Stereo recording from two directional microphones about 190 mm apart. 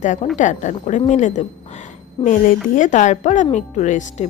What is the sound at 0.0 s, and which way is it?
Speech, 40° left (ahead or behind).